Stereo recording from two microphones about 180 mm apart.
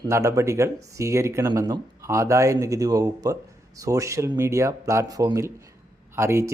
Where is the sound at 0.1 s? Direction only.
15° right (ahead or behind).